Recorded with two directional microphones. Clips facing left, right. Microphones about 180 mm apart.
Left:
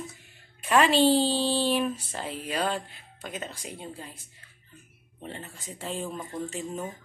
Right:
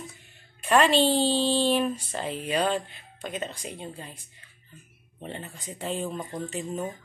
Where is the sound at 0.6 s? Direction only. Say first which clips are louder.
Even; 10° left (ahead or behind).